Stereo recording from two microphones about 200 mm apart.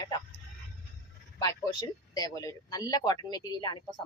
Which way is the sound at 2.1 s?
15° left (ahead or behind).